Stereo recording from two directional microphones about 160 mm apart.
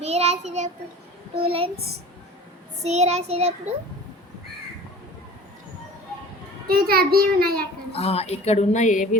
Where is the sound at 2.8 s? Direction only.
45° right (ahead or behind).